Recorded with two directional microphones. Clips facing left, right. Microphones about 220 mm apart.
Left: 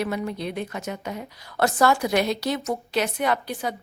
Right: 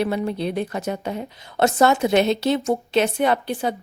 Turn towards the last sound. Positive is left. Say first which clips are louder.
# right 4 dB
turn(degrees=-25)  # may be behind; listen again after turning